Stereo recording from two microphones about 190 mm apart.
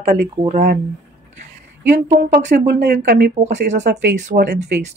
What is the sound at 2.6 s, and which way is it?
Speech, 60° right (ahead or behind).